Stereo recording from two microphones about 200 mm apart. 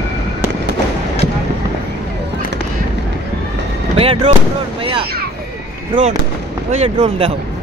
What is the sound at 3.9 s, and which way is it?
Speech, 30° right (ahead or behind).